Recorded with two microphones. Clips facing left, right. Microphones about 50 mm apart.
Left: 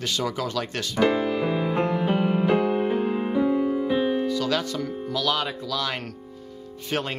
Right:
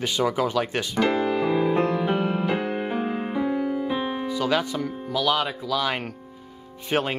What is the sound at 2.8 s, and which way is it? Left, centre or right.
Music, centre.